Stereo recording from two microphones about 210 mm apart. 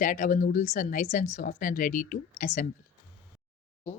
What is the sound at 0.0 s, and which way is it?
A woman's voice, 40° left (ahead or behind).